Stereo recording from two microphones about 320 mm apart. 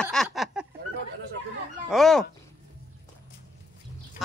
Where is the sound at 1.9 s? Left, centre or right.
Centre.